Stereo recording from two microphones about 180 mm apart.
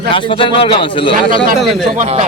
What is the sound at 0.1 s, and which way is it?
A man's voice, 30° left (ahead or behind).